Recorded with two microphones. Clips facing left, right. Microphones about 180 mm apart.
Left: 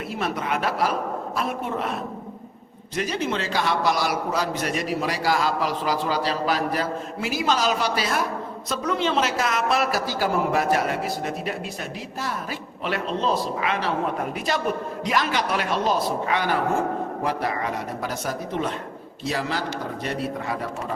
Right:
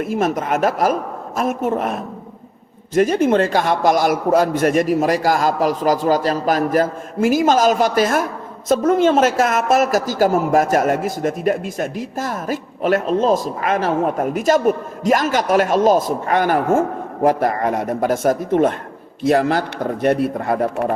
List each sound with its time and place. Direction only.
0.0 s a man's voice: 45° right (ahead or behind)